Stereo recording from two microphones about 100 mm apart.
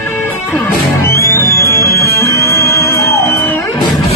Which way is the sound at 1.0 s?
30° left (ahead or behind).